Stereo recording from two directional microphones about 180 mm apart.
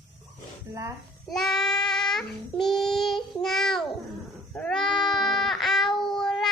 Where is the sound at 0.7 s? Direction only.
15° right (ahead or behind).